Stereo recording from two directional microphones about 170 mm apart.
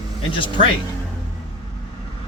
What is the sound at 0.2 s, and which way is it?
Speech, 30° left (ahead or behind).